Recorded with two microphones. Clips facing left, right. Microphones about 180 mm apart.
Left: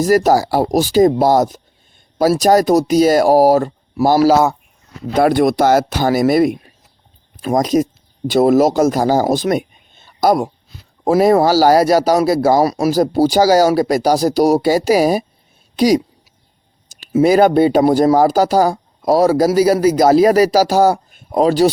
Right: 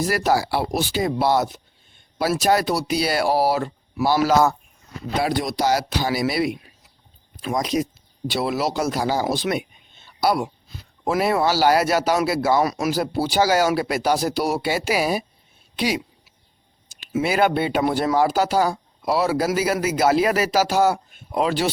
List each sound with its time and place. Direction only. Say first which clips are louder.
0.0 s speech: left 8 dB; 40° left (ahead or behind)
5.2 s speech: left 10 dB; 55° left (ahead or behind)
17.0 s speech: left 9 dB; 35° left (ahead or behind)